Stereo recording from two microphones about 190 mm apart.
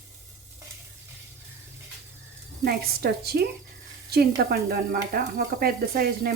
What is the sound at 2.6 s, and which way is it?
A woman's voice, 55° right (ahead or behind).